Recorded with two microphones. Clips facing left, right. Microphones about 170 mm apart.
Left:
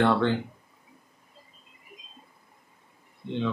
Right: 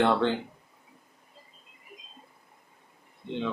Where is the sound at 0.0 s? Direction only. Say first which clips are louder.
Left 1 dB; 15° right (ahead or behind).